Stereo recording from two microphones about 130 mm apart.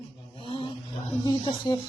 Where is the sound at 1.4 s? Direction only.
40° left (ahead or behind).